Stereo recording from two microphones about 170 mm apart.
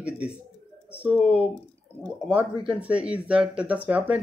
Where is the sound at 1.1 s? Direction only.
5° right (ahead or behind).